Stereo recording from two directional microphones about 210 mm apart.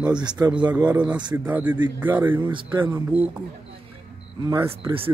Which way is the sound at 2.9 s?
5° right (ahead or behind).